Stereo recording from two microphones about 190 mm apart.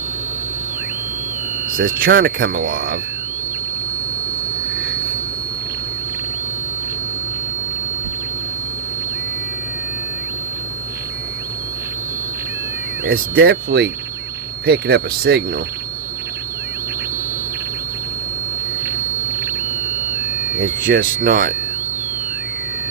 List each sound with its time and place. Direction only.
1.7 s speech: 50° right (ahead or behind)
13.1 s speech: 55° right (ahead or behind)
20.8 s speech: 50° right (ahead or behind)